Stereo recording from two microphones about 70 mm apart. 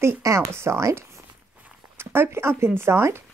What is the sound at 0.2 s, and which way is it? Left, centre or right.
Speech, right.